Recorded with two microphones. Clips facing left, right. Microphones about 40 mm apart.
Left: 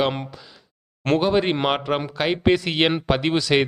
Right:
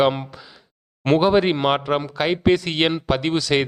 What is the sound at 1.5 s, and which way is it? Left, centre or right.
Speech, centre.